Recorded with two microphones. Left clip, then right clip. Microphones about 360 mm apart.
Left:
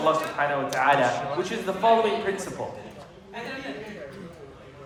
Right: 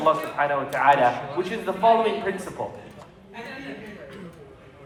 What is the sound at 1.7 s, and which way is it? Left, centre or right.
Speech, centre.